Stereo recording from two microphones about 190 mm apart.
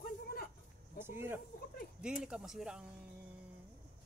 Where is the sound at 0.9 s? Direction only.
10° right (ahead or behind).